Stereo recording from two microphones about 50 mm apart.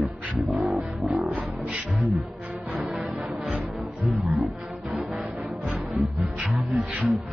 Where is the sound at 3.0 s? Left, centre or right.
Right.